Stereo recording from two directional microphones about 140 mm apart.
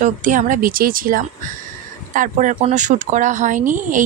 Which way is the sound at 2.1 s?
65° right (ahead or behind).